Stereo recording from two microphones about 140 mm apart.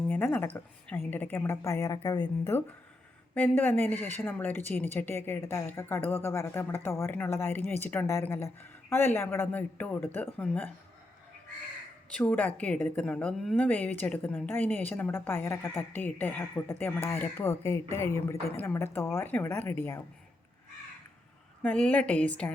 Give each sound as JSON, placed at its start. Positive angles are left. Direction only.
{"t": 0.1, "sound": "a woman's voice", "side_deg": 10}
{"t": 12.1, "sound": "a woman's voice", "side_deg": 10}
{"t": 21.6, "sound": "a woman's voice", "side_deg": 10}